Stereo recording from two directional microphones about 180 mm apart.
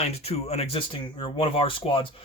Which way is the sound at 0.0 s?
35° left (ahead or behind).